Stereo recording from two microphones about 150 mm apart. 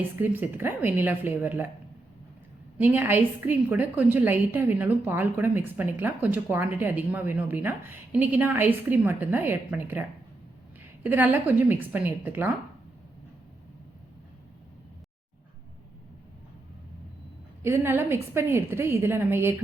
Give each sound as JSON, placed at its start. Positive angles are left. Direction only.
{"t": 0.2, "sound": "a woman's voice", "side_deg": -10}
{"t": 2.7, "sound": "a woman's voice", "side_deg": -15}
{"t": 11.0, "sound": "a woman's voice", "side_deg": -10}
{"t": 17.6, "sound": "a woman's voice", "side_deg": -15}